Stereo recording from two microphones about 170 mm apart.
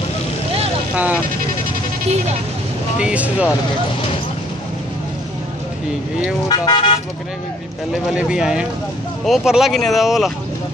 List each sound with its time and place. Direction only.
0.9 s vehicle: 10° right (ahead or behind)
3.0 s speech: 5° right (ahead or behind)
6.5 s speech: 25° left (ahead or behind)
7.9 s speech: 5° right (ahead or behind)